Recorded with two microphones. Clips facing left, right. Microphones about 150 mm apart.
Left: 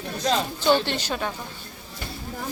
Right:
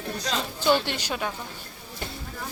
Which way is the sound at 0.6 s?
10° right (ahead or behind).